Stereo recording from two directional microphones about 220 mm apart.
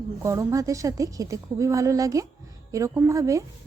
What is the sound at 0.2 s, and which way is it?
A woman's voice, 15° right (ahead or behind).